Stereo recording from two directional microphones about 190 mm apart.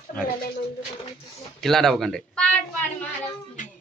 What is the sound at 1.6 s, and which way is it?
Speech, centre (ahead or behind).